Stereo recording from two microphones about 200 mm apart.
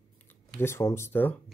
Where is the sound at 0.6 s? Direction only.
15° left (ahead or behind).